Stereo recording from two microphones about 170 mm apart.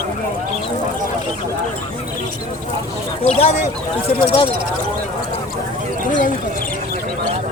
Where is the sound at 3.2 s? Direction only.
40° left (ahead or behind).